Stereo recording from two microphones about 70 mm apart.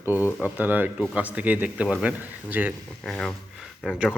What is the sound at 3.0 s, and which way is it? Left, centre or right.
Speech, centre.